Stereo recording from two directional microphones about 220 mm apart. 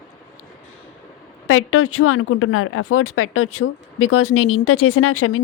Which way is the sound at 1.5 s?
70° left (ahead or behind).